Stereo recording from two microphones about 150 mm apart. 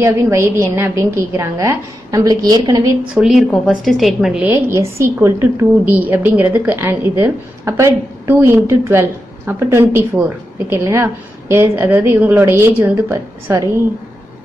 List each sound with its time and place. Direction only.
0.0 s a woman's voice: 15° right (ahead or behind)
3.2 s a woman's voice: centre (ahead or behind); by 13.7 s 20° right (ahead or behind)